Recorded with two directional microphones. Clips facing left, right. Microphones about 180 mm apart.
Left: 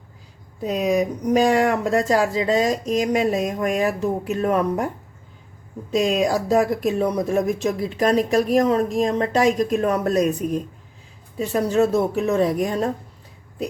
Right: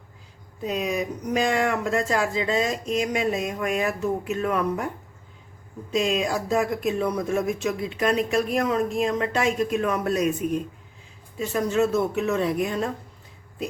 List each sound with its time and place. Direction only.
0.6 s speech: 40° left (ahead or behind)
5.9 s speech: 40° left (ahead or behind)